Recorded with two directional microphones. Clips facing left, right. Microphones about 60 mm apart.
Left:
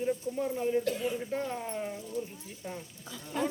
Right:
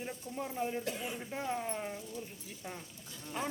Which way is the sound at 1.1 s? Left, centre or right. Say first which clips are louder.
Left 4 dB; centre.